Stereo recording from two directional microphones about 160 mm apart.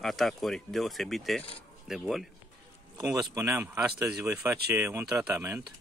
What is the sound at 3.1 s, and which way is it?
Speech, 20° right (ahead or behind).